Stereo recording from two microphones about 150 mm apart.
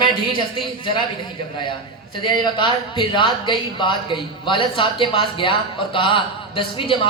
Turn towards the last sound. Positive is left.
turn(degrees=35)  # may be behind; listen again after turning